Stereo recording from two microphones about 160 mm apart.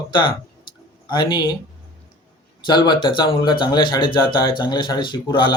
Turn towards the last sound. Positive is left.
turn(degrees=30)  # may be behind; listen again after turning